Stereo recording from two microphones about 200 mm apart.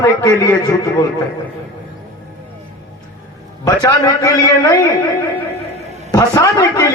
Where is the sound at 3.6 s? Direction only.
20° left (ahead or behind).